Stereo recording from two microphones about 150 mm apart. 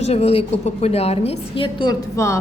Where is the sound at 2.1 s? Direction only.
20° left (ahead or behind).